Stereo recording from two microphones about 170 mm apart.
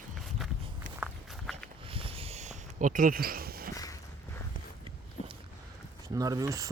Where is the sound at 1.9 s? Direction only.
35° right (ahead or behind); by 3.7 s 60° right (ahead or behind).